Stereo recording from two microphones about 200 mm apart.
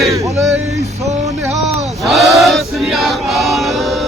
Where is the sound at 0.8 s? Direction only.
35° right (ahead or behind).